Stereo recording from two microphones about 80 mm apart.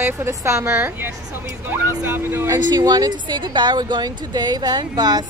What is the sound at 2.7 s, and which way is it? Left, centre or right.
Speech, right.